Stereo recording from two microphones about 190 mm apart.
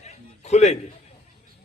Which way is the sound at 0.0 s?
35° left (ahead or behind).